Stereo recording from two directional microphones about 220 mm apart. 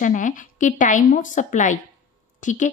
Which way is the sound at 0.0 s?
35° left (ahead or behind).